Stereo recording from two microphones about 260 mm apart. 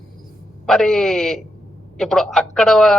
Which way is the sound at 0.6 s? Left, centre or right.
Centre.